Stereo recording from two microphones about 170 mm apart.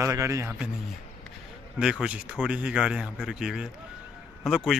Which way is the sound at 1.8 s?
5° right (ahead or behind).